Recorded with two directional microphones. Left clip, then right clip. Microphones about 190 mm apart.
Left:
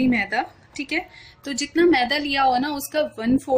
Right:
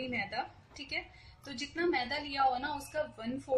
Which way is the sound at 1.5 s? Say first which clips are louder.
Left 15 dB; 60° left (ahead or behind).